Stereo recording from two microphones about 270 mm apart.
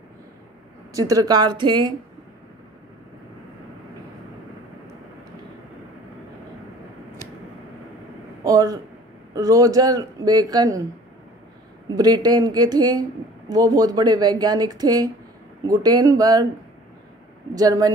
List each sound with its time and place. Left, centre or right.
0.9 s speech: centre
8.5 s a man's voice: centre
11.9 s speech: centre
17.6 s speech: centre